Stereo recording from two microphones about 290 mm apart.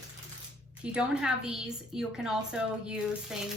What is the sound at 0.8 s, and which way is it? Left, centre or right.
A woman's voice, centre.